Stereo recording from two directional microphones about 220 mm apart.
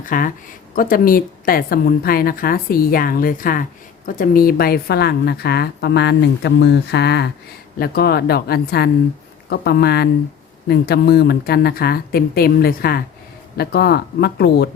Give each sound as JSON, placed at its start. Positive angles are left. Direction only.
{"t": 0.0, "sound": "a woman's voice", "side_deg": 40}